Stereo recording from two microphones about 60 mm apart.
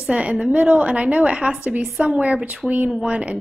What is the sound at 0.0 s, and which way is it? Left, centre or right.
A woman's voice, centre.